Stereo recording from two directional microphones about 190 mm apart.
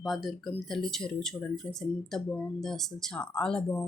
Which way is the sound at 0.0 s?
Centre (ahead or behind).